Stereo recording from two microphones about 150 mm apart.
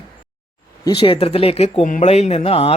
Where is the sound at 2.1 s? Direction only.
45° left (ahead or behind).